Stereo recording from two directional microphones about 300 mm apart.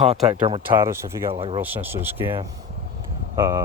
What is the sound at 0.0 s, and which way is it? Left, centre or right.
Speech, centre.